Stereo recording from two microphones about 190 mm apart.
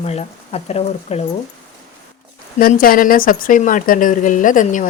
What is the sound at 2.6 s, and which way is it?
Speech, 50° left (ahead or behind).